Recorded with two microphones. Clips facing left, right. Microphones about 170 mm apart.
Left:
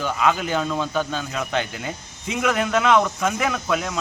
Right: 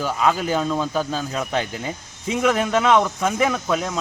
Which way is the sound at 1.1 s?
35° right (ahead or behind).